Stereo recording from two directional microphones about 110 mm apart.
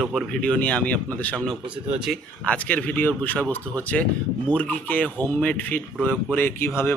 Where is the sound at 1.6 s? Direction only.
10° right (ahead or behind).